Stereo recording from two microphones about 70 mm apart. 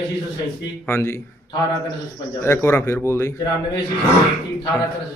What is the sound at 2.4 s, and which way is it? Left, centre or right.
Speech, left.